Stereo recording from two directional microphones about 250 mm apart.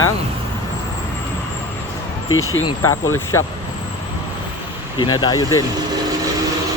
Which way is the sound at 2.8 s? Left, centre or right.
Centre.